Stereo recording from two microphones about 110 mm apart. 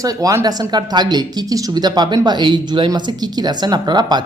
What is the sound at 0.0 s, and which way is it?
Speech, 35° right (ahead or behind).